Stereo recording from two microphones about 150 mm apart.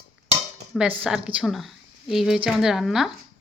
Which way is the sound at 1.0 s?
5° right (ahead or behind).